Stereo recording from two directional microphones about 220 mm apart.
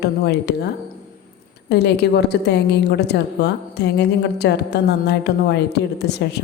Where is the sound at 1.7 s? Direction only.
50° left (ahead or behind).